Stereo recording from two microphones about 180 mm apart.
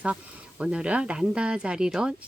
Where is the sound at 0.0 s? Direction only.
5° right (ahead or behind).